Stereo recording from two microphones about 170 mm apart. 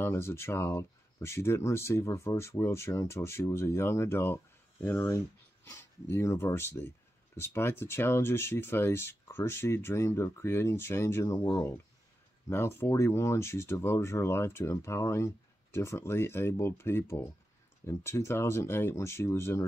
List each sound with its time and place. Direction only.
0.0 s speech: 15° left (ahead or behind)